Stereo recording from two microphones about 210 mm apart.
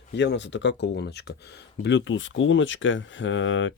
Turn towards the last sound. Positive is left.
turn(degrees=65)  # may be behind; listen again after turning